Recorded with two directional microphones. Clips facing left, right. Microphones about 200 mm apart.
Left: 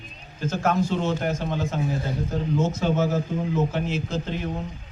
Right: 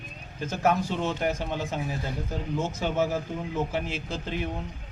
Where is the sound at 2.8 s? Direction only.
15° right (ahead or behind).